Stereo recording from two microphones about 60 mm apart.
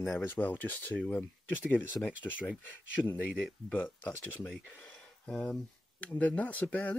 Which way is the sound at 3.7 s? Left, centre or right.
Left.